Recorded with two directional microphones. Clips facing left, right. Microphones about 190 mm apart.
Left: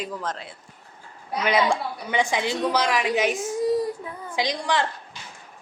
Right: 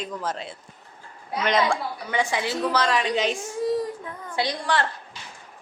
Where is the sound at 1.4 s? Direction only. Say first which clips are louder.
Left 1 dB; 15° left (ahead or behind).